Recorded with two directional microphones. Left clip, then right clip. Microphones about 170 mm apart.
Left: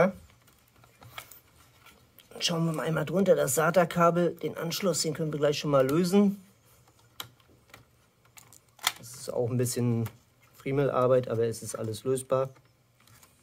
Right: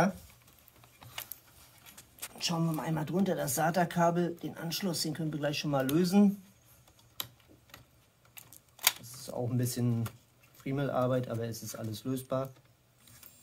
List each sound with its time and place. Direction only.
2.3 s speech: 45° left (ahead or behind)
8.4 s a sound: 5° left (ahead or behind)
9.2 s speech: 55° left (ahead or behind)